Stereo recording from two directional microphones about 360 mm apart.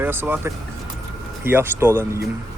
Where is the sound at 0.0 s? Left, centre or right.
Centre.